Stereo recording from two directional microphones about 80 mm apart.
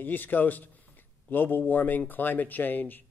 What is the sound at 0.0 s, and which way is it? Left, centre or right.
A man's voice, left.